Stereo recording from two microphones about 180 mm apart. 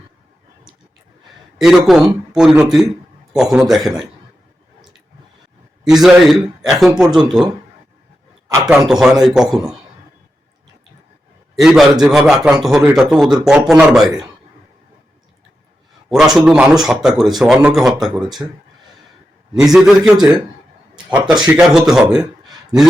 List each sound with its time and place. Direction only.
1.5 s speech: centre (ahead or behind)
5.8 s speech: centre (ahead or behind)
8.6 s speech: 5° right (ahead or behind)
11.6 s speech: centre (ahead or behind)
16.0 s speech: centre (ahead or behind)
19.5 s speech: centre (ahead or behind)
21.4 s a man's voice: 5° right (ahead or behind)